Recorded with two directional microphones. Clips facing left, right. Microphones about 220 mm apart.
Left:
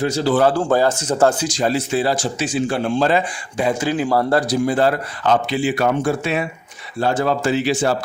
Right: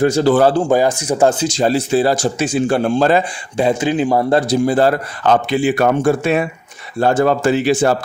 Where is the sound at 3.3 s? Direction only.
25° right (ahead or behind).